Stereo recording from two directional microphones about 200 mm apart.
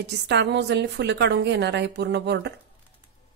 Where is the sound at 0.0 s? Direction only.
60° right (ahead or behind).